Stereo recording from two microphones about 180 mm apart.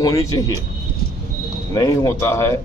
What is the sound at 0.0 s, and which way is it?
Speech, 20° left (ahead or behind).